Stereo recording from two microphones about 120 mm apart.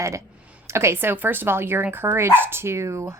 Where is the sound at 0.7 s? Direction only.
25° right (ahead or behind).